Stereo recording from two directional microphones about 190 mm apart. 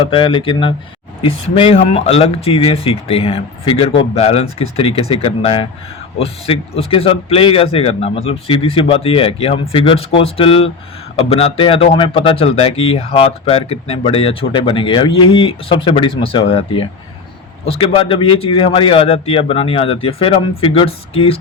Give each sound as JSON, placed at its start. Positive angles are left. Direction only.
{"t": 0.0, "sound": "a man's voice", "side_deg": 25}